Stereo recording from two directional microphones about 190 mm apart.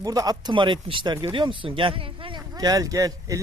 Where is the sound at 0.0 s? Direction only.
20° right (ahead or behind).